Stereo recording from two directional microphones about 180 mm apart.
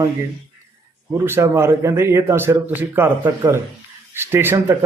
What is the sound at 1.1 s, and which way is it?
A man's voice, 15° right (ahead or behind).